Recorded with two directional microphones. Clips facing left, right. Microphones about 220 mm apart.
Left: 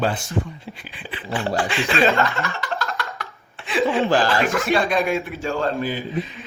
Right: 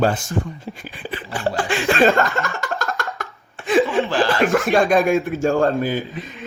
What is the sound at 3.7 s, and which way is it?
Chuckle, 45° right (ahead or behind).